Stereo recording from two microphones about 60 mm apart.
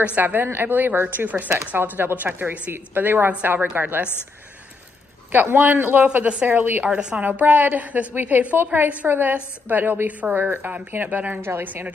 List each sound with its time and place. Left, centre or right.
0.0 s a woman's voice: right
5.3 s a woman's voice: right
6.9 s a woman's voice: centre
7.2 s a woman's voice: right